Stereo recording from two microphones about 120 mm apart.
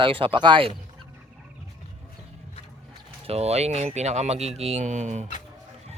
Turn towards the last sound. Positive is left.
turn(degrees=-80)